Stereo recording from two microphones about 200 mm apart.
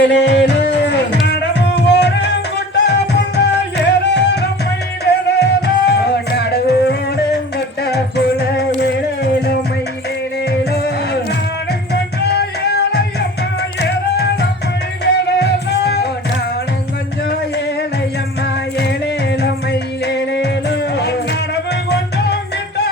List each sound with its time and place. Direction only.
0.1 s music: 60° left (ahead or behind)
10.6 s music: 55° left (ahead or behind)
18.4 s music: 55° left (ahead or behind)